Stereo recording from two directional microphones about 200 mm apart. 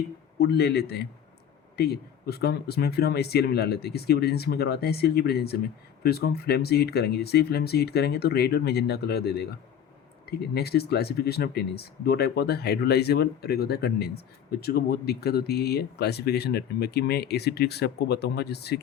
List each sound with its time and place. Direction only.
0.3 s speech: 50° left (ahead or behind)